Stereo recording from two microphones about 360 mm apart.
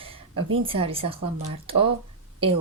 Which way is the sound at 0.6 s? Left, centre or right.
Centre.